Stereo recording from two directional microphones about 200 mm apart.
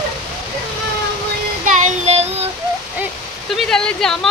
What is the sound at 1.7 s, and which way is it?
Child singing, 40° right (ahead or behind).